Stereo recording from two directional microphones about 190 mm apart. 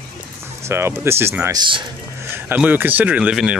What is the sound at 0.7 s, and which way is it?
Speech, 15° right (ahead or behind).